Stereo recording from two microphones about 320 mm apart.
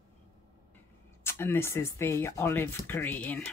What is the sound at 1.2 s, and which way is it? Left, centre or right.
Speech, centre.